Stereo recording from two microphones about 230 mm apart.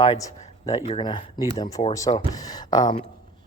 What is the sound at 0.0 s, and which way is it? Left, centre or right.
Speech, left.